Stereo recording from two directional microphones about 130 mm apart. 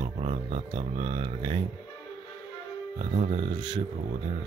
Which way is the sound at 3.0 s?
45° right (ahead or behind).